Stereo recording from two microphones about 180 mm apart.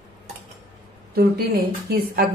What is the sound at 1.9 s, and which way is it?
Speech, 60° right (ahead or behind).